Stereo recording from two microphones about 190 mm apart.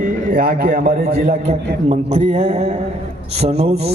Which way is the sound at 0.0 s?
45° right (ahead or behind).